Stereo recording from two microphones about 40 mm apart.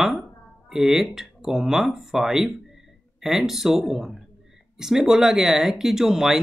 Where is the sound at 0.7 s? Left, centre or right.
Centre.